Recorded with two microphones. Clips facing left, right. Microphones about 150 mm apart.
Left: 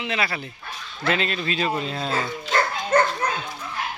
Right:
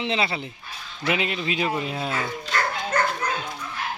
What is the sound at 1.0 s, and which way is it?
Speech, 15° right (ahead or behind).